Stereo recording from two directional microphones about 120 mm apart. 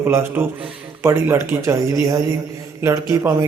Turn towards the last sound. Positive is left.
turn(degrees=-30)  # may be behind; listen again after turning